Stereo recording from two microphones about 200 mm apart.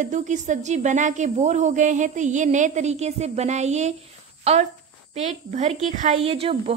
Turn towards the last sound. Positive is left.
turn(degrees=-30)  # may be behind; listen again after turning